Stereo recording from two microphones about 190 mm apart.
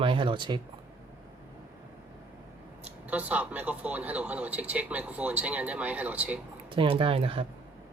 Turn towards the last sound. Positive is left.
turn(degrees=-30)  # may be behind; listen again after turning